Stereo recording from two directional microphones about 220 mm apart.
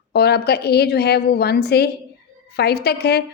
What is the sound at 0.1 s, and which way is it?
A woman's voice, 45° left (ahead or behind).